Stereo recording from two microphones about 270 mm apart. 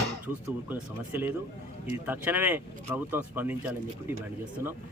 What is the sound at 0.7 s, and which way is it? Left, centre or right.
Speech, centre.